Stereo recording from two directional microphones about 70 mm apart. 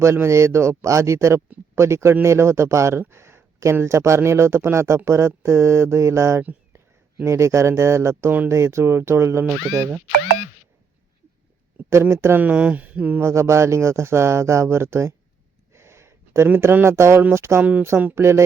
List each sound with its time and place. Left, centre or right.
0.0 s speech: right
11.9 s speech: right
12.4 s speech: right
13.1 s speech: right
15.7 s a sound: right
16.7 s speech: right
17.6 s speech: right
17.8 s speech: right